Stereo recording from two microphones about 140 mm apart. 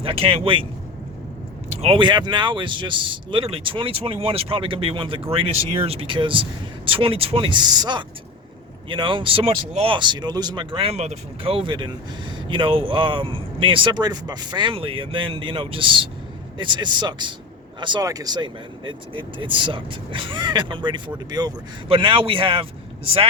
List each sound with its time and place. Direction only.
0.0 s speech: 40° right (ahead or behind)
1.8 s speech: 40° right (ahead or behind)